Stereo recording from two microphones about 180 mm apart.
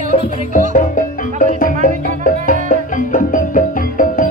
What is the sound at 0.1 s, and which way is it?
Music, 45° left (ahead or behind).